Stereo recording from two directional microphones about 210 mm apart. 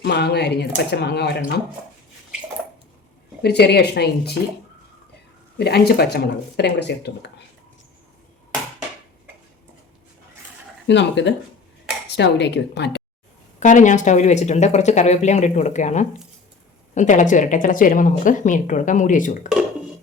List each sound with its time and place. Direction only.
0.0 s speech: 50° left (ahead or behind)
3.4 s speech: 50° left (ahead or behind)
5.5 s speech: 50° left (ahead or behind)
10.8 s speech: 55° left (ahead or behind)
13.6 s speech: 35° left (ahead or behind)